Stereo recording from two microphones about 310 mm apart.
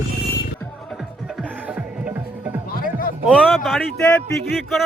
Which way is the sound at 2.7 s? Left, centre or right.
Left.